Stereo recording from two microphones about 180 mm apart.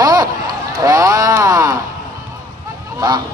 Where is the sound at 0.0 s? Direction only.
20° right (ahead or behind).